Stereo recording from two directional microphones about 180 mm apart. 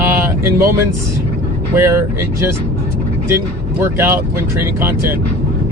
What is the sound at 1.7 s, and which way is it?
Speech, 15° right (ahead or behind).